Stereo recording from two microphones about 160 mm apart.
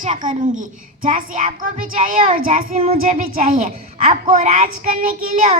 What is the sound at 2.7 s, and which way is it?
A child's voice, 40° right (ahead or behind).